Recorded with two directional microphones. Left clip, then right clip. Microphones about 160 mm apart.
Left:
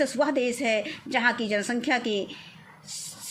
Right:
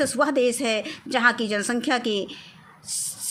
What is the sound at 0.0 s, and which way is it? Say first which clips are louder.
A woman's voice: right 3 dB; 40° right (ahead or behind).